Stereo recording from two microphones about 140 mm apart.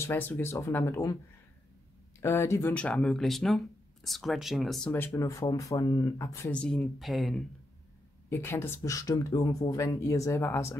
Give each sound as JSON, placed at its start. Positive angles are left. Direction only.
{"t": 0.0, "sound": "speech", "side_deg": 15}
{"t": 2.1, "sound": "speech", "side_deg": 20}
{"t": 2.7, "sound": "speech", "side_deg": 5}
{"t": 4.9, "sound": "speech", "side_deg": 20}
{"t": 6.5, "sound": "speech", "side_deg": 5}
{"t": 8.3, "sound": "speech", "side_deg": 15}